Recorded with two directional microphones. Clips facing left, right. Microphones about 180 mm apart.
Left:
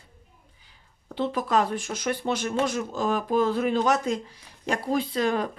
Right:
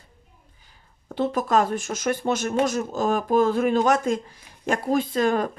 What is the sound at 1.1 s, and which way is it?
Speech, 45° right (ahead or behind).